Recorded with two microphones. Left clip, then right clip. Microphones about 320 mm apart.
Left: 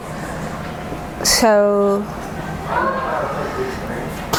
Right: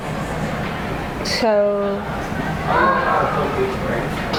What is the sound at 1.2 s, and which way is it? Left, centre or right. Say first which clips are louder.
Speech: left 4 dB; left.